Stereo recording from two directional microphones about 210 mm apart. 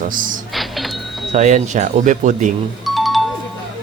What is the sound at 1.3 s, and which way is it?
Speech, 35° right (ahead or behind).